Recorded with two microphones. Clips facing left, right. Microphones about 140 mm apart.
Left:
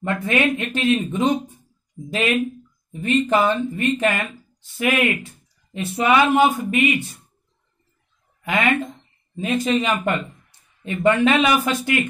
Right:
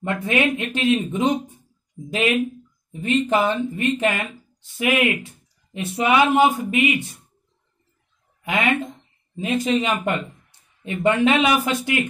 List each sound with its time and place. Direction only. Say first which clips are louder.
0.0 s speech: left 1 dB; 15° right (ahead or behind)
8.4 s speech: left 1 dB; 15° right (ahead or behind)